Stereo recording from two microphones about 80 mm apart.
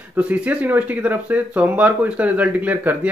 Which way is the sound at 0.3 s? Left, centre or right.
Centre.